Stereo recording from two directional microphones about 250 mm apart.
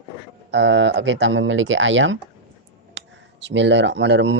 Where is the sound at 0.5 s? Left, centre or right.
Right.